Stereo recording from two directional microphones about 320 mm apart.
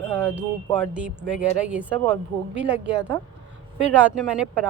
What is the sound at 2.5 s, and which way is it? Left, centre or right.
Speech, right.